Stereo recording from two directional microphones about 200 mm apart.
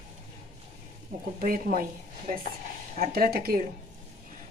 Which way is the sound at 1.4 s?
45° right (ahead or behind).